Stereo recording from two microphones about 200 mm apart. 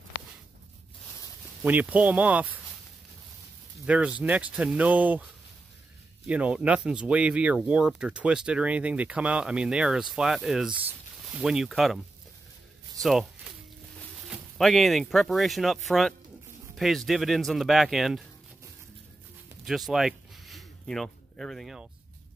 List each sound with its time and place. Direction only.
1.6 s speech: 10° right (ahead or behind)
3.8 s speech: 5° right (ahead or behind)
13.0 s speech: centre (ahead or behind)
19.6 s a sound: centre (ahead or behind)